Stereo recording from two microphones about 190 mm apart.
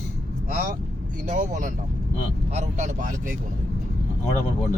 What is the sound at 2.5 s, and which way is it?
Speech, 40° right (ahead or behind).